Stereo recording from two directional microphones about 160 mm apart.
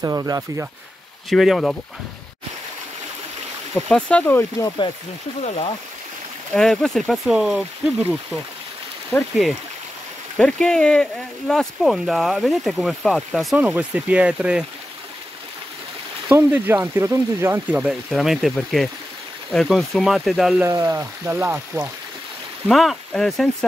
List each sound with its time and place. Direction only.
0.0 s speech: 20° right (ahead or behind)
1.3 s speech: centre (ahead or behind)
3.7 s speech: 10° left (ahead or behind)
6.5 s speech: 5° left (ahead or behind)
16.3 s speech: 10° right (ahead or behind)
20.6 s speech: 15° right (ahead or behind)
22.7 s speech: centre (ahead or behind)